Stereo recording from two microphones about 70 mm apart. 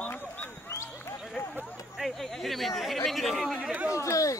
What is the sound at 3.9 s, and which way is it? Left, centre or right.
Chatter, left.